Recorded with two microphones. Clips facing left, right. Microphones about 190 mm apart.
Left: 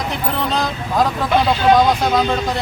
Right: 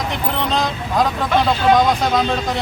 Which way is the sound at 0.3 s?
Centre (ahead or behind).